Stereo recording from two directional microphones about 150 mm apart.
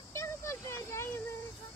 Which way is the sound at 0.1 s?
20° left (ahead or behind).